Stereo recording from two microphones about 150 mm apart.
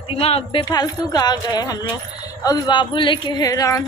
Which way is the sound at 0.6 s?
25° left (ahead or behind).